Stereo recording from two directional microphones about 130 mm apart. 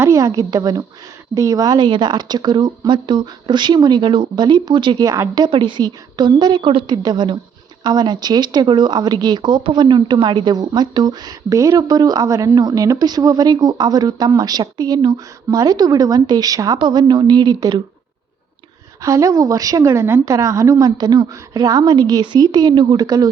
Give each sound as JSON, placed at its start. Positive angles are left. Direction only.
{"t": 0.0, "sound": "a woman's voice", "side_deg": -25}
{"t": 5.3, "sound": "speech", "side_deg": -35}
{"t": 19.0, "sound": "a woman's voice", "side_deg": -25}